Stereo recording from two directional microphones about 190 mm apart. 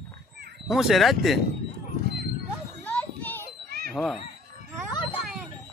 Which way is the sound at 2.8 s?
10° left (ahead or behind).